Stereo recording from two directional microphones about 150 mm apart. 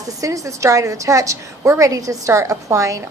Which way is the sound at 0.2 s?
20° right (ahead or behind).